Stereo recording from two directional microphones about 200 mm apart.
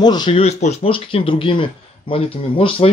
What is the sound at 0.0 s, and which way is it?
Speech, 20° left (ahead or behind).